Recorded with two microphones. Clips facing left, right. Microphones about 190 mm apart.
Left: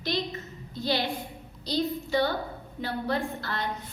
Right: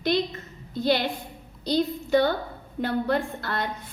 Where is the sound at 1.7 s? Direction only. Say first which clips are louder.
Right 5 dB; 55° right (ahead or behind).